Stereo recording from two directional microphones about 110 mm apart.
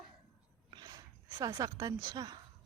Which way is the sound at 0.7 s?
35° right (ahead or behind).